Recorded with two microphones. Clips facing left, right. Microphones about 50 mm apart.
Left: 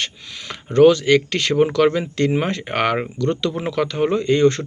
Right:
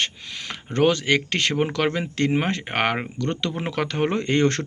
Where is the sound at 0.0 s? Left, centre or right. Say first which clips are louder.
Right 1 dB; right.